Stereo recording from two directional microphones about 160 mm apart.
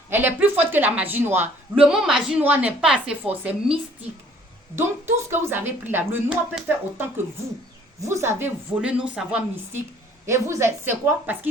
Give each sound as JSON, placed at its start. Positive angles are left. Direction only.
{"t": 0.1, "sound": "a woman's voice", "side_deg": -10}
{"t": 8.2, "sound": "a woman's voice", "side_deg": -15}
{"t": 10.2, "sound": "a woman's voice", "side_deg": -15}